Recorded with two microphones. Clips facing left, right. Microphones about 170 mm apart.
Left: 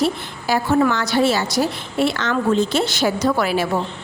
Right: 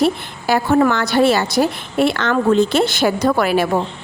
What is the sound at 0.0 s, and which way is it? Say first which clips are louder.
A woman's voice: right 3 dB; 60° right (ahead or behind).